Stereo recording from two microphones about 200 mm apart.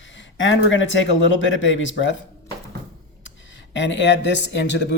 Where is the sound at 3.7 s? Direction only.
65° left (ahead or behind).